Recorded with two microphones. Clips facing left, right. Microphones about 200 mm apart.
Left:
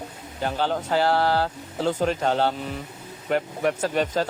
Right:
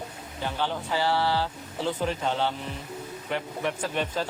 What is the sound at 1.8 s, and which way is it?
Speech, 40° left (ahead or behind).